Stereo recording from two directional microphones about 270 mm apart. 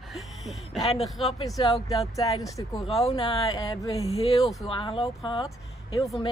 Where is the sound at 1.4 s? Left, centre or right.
Centre.